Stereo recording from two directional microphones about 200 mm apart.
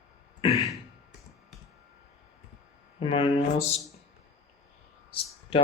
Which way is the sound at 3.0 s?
25° left (ahead or behind).